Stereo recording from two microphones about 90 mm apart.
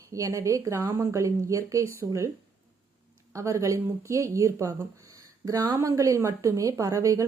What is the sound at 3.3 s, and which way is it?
Speech, 35° right (ahead or behind).